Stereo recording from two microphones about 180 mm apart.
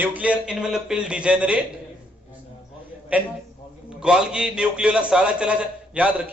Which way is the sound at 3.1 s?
10° right (ahead or behind).